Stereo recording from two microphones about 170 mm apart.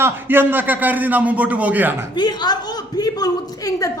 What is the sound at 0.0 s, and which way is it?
A man's voice, 15° right (ahead or behind).